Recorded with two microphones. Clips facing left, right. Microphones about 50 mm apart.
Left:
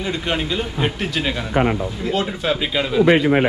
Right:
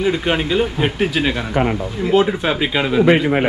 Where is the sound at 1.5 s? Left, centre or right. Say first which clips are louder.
Even; centre.